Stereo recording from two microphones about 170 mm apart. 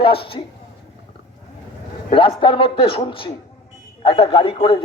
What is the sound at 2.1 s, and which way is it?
A man's voice, 30° left (ahead or behind).